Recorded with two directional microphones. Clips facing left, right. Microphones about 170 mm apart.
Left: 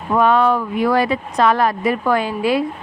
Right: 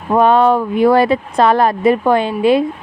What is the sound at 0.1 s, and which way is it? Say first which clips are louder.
Speech: right 4 dB; 30° right (ahead or behind).